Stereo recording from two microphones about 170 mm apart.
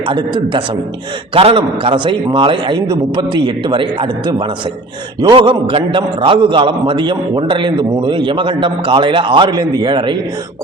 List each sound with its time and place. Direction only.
0.1 s a man's voice: 25° right (ahead or behind)
5.2 s a man's voice: 30° right (ahead or behind)